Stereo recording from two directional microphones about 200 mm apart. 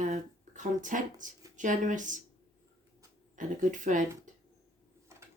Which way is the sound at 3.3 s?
40° right (ahead or behind).